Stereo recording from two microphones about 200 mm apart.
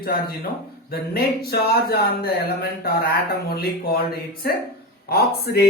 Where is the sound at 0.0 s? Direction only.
50° left (ahead or behind).